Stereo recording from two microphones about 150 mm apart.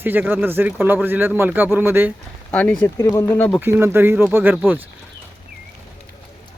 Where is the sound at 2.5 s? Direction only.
10° left (ahead or behind).